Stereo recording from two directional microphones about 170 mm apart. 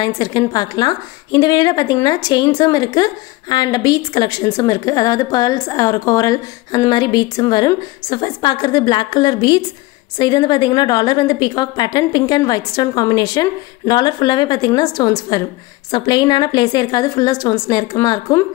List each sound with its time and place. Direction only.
0.0 s a woman's voice: 25° left (ahead or behind)